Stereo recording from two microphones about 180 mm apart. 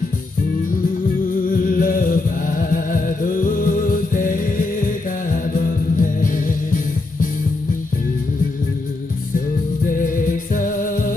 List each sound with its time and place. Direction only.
1.5 s music: 50° left (ahead or behind)
9.9 s music: 50° left (ahead or behind)